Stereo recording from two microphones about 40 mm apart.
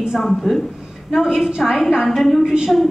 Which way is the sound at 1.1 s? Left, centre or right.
Centre.